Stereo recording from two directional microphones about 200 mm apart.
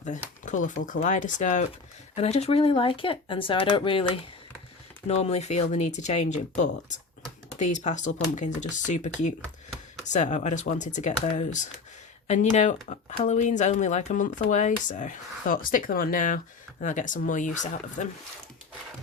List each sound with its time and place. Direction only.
0.4 s speech: 40° left (ahead or behind)